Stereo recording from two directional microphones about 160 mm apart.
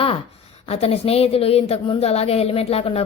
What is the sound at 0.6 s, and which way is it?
Speech, 40° left (ahead or behind).